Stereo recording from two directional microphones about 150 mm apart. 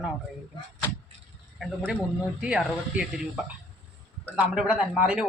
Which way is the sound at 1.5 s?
Centre (ahead or behind).